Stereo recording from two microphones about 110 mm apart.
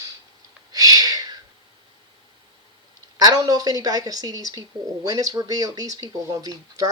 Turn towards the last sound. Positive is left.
turn(degrees=-35)  # may be behind; listen again after turning